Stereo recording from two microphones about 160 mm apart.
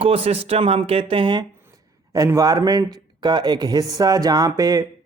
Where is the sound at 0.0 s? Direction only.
40° right (ahead or behind).